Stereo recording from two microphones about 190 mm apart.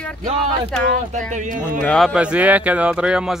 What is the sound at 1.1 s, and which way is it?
Speech, 40° right (ahead or behind).